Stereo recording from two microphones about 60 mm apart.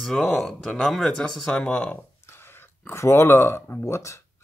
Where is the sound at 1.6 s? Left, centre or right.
Left.